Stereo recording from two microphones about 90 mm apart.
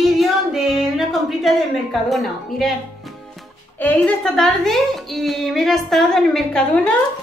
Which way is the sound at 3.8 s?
20° left (ahead or behind).